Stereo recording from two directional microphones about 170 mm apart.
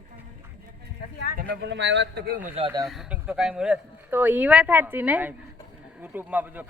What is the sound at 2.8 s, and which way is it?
Speech, centre (ahead or behind).